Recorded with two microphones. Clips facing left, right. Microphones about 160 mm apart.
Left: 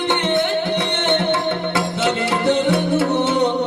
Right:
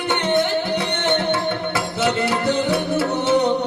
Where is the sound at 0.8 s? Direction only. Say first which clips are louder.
Left 1 dB; 25° left (ahead or behind).